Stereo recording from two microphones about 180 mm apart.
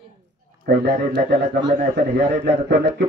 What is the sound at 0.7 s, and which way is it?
Speech, 70° right (ahead or behind).